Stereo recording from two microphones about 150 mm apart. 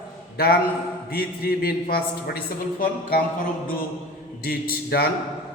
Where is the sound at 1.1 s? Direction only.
90° left.